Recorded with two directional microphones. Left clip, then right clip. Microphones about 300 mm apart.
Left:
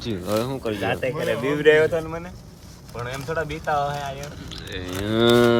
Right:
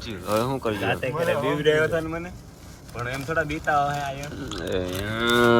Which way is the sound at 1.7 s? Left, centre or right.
Left.